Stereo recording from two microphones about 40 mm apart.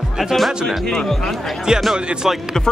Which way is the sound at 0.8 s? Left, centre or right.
Centre.